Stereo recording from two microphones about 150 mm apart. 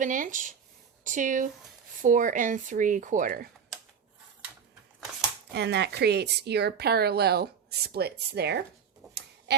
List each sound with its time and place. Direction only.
0.0 s speech: 60° right (ahead or behind)
5.5 s a woman's voice: 90° right
9.5 s quack: 90° right